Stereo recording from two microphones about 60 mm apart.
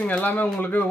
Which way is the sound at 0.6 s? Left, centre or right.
Left.